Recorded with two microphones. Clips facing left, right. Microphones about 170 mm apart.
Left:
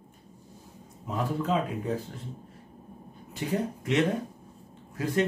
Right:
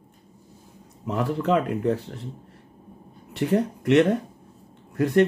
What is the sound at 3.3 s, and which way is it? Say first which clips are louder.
Speech: right 7 dB; 65° right (ahead or behind).